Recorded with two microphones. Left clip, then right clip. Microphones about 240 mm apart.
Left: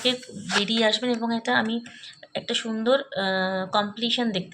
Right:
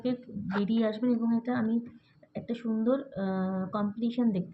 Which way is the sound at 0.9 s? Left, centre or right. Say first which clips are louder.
Left 5 dB; centre.